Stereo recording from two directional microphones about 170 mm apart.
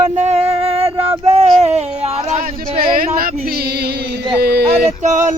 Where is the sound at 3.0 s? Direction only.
60° right (ahead or behind).